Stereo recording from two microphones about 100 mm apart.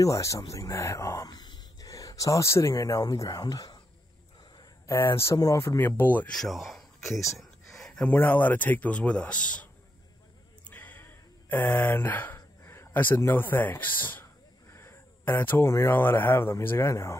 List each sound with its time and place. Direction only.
0.0 s speech: 30° left (ahead or behind)
4.8 s speech: 25° left (ahead or behind)
6.3 s a sound: centre (ahead or behind)
8.1 s speech: 20° left (ahead or behind)
10.6 s a sound: 15° left (ahead or behind)
12.4 s speech: 25° left (ahead or behind)